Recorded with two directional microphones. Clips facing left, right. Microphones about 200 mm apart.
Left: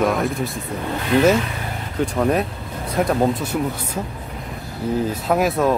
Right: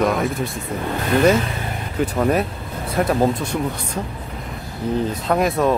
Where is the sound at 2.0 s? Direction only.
Centre (ahead or behind).